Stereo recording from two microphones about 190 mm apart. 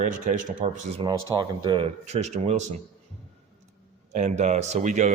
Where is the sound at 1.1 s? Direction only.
20° right (ahead or behind).